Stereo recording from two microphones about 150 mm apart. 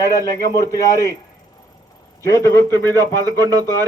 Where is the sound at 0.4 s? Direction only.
25° left (ahead or behind).